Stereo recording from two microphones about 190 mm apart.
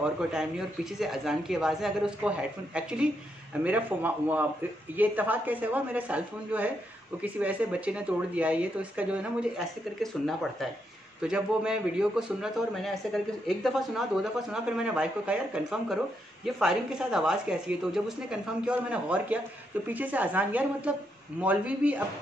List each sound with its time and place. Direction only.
0.0 s a man's voice: 5° right (ahead or behind)